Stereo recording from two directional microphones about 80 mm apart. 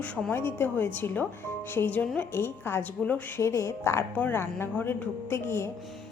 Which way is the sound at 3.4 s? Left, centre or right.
Left.